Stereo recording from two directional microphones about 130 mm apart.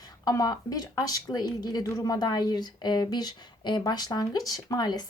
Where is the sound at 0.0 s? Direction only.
30° left (ahead or behind).